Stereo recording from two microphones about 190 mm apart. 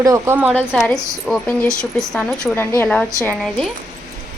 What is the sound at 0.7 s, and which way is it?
A woman's voice, centre (ahead or behind).